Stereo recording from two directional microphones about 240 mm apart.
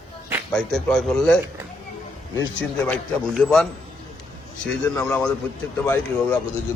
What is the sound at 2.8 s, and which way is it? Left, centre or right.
Speech, centre.